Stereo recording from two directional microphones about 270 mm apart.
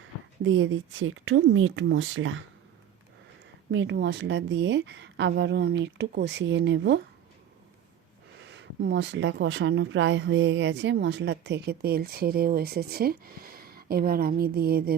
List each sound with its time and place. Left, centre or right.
0.4 s speech: right
3.7 s speech: right
8.4 s speech: right